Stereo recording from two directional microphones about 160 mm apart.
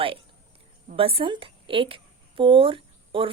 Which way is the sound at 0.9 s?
35° right (ahead or behind).